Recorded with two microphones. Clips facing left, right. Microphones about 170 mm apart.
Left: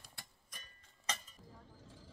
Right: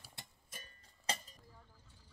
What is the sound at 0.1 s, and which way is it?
Music, 25° right (ahead or behind).